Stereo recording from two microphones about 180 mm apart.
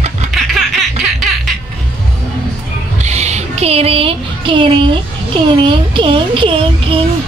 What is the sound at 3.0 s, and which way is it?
Music, 40° right (ahead or behind).